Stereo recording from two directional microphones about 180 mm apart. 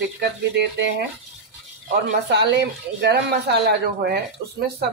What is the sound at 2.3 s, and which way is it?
Speech, 65° right (ahead or behind).